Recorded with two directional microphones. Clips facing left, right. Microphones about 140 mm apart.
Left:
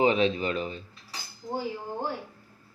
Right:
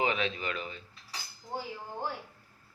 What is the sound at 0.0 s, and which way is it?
Speech, 30° left (ahead or behind).